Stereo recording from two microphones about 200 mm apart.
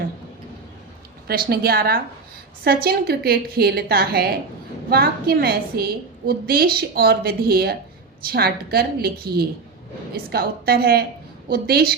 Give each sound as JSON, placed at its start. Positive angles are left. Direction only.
{"t": 1.3, "sound": "a woman's voice", "side_deg": -50}